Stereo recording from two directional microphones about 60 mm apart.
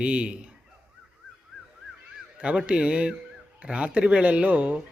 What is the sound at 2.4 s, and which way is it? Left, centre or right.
A man's voice, right.